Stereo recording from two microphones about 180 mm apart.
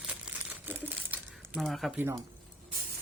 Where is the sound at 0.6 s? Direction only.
10° right (ahead or behind).